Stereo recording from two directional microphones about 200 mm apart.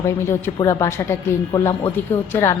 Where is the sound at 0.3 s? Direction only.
15° left (ahead or behind).